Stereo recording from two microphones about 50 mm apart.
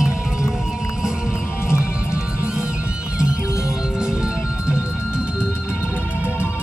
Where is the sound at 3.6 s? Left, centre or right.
Centre.